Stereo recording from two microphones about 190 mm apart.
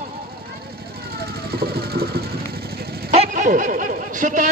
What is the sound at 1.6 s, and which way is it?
Sewing machine, 55° right (ahead or behind).